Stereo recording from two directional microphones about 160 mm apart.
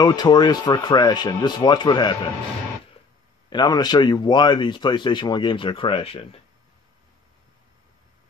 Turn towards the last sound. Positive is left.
turn(degrees=35)  # may be behind; listen again after turning